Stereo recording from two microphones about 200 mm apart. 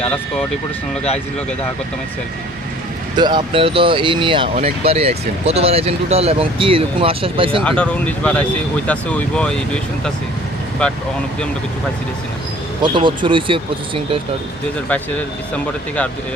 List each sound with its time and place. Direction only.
3.2 s speech: 20° right (ahead or behind)
7.6 s speech: 5° left (ahead or behind)
12.8 s speech: 25° right (ahead or behind)